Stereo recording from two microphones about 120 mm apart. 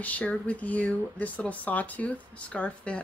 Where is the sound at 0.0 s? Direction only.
10° left (ahead or behind).